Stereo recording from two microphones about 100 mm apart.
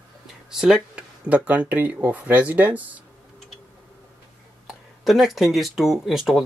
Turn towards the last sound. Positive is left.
turn(degrees=-5)  # may be behind; listen again after turning